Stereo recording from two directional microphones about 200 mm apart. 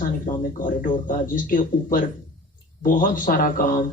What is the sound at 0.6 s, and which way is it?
Speech, 40° left (ahead or behind).